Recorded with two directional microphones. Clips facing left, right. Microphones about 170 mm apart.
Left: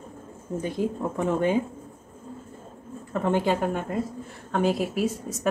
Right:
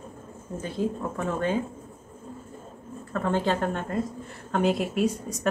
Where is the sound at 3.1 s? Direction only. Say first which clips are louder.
Left 2 dB; 15° left (ahead or behind).